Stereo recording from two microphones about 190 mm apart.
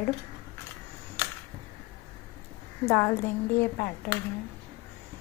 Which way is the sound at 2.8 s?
10° left (ahead or behind).